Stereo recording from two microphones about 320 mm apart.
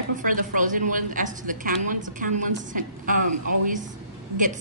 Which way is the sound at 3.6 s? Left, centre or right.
Right.